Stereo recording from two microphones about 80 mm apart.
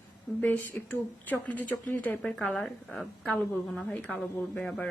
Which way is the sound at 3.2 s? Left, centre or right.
Centre.